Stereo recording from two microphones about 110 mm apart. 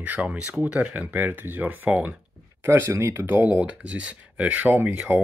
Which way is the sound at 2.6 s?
25° right (ahead or behind).